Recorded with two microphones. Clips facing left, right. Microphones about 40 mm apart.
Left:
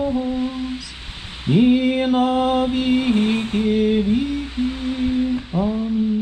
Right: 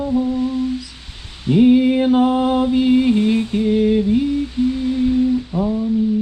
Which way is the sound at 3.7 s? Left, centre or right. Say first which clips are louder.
Right 2 dB; left.